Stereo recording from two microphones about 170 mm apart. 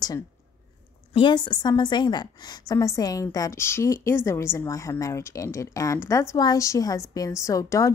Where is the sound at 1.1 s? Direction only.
25° left (ahead or behind).